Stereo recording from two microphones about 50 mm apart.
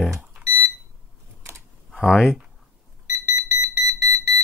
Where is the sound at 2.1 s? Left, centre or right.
Centre.